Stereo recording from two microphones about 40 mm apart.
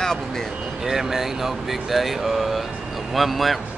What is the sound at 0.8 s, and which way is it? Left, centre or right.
Speech, centre.